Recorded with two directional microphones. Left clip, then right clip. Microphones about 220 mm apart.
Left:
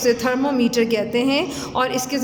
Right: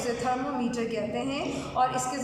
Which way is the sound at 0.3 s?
45° left (ahead or behind).